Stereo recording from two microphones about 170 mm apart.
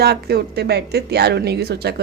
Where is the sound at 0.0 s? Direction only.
70° right (ahead or behind).